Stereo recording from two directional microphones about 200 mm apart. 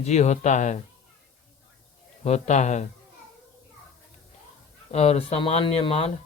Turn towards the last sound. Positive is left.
turn(degrees=30)  # may be behind; listen again after turning